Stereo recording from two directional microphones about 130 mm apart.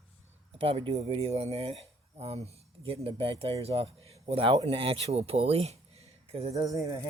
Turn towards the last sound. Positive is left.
turn(degrees=-25)  # may be behind; listen again after turning